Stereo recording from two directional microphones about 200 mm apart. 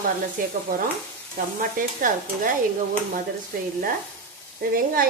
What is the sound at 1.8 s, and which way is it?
Speech, 45° right (ahead or behind).